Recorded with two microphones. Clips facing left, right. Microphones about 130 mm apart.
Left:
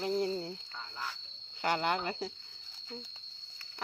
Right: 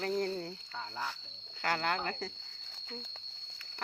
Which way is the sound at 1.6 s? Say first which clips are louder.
Left 2 dB; 20° left (ahead or behind).